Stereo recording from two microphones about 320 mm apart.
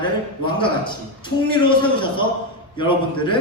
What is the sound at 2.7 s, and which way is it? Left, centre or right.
Speech, centre.